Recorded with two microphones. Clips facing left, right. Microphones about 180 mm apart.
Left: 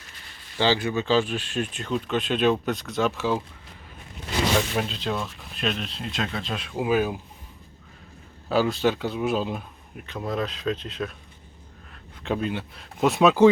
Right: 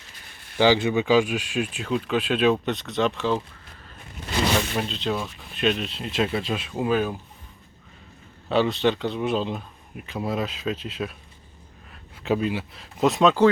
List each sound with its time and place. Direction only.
0.6 s speech: 15° right (ahead or behind); by 3.4 s 10° left (ahead or behind)
4.8 s speech: centre (ahead or behind)
8.4 s speech: centre (ahead or behind)
10.1 s speech: 5° right (ahead or behind)
12.2 s speech: 5° right (ahead or behind)